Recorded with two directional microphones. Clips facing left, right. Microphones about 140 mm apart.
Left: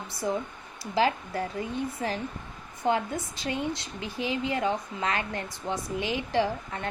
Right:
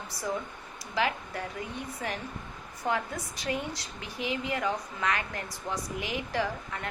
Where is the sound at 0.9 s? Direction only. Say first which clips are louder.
Left 5 dB; 30° left (ahead or behind).